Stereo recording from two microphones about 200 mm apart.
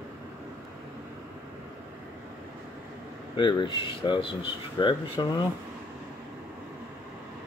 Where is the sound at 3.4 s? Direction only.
25° left (ahead or behind).